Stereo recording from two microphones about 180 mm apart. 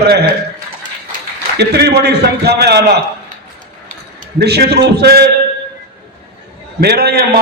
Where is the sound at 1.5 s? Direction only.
65° right (ahead or behind).